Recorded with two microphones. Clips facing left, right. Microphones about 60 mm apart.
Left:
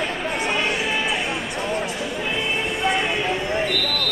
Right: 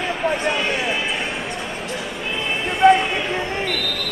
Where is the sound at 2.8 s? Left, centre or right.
Right.